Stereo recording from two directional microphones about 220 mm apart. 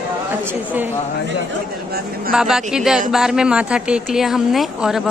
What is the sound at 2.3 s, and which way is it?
A woman's voice, 5° right (ahead or behind).